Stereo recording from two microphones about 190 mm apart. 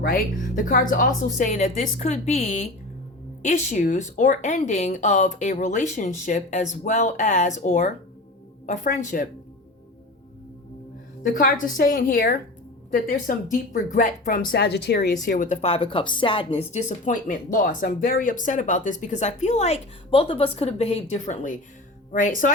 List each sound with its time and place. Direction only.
0.0 s speech: 45° left (ahead or behind)
11.2 s speech: 45° left (ahead or behind)
15.2 s speech: 45° left (ahead or behind)